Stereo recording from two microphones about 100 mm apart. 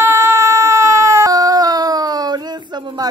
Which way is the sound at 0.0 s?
25° right (ahead or behind).